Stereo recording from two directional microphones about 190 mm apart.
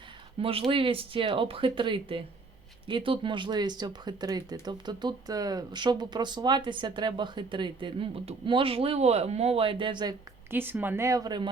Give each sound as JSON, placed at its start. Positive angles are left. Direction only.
{"t": 0.3, "sound": "speech", "side_deg": -30}
{"t": 10.5, "sound": "speech", "side_deg": -10}